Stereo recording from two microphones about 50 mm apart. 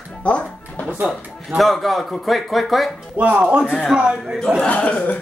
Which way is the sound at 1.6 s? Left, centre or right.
Centre.